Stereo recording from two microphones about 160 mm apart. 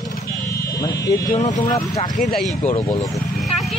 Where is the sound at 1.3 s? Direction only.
50° left (ahead or behind).